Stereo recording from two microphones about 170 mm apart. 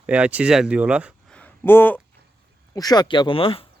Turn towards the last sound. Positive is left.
turn(degrees=30)  # may be behind; listen again after turning